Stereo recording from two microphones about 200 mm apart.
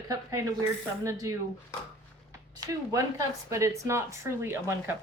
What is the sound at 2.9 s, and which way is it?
Speech, 15° right (ahead or behind).